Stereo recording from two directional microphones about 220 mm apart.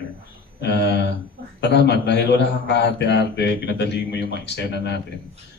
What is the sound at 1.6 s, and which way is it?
A man's voice, 50° left (ahead or behind).